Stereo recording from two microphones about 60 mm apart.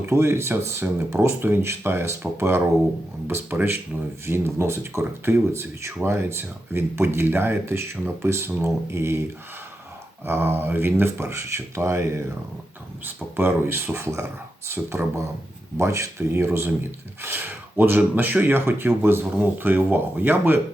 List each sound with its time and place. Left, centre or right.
0.0 s speech: right
10.2 s speech: right
13.1 s speech: right
15.0 s speech: right
15.8 s speech: right
19.2 s speech: right